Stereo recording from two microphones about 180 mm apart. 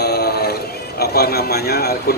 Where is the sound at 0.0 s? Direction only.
60° left (ahead or behind).